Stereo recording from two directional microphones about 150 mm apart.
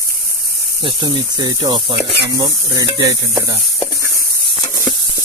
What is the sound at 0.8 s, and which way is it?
Speech, 30° right (ahead or behind).